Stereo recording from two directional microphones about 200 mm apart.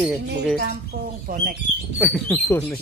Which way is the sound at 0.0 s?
5° right (ahead or behind).